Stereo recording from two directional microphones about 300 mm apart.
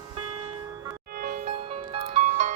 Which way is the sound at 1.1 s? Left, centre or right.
Right.